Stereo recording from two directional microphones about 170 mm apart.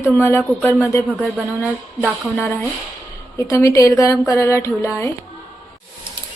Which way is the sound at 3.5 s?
20° left (ahead or behind).